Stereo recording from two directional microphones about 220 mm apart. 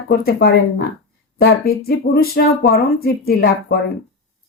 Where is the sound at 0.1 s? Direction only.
45° left (ahead or behind).